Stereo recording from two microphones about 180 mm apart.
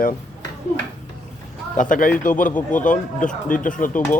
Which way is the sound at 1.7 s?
45° left (ahead or behind).